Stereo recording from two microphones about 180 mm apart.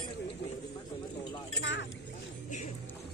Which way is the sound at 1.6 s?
80° left.